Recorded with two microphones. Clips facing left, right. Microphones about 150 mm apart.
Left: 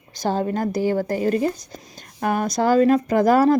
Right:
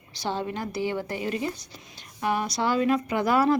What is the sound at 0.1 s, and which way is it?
A woman's voice, 45° left (ahead or behind).